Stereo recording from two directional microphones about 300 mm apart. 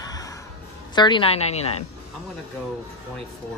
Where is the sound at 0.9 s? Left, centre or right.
Centre.